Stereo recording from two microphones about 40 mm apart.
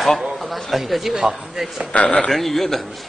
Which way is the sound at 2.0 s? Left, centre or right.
Left.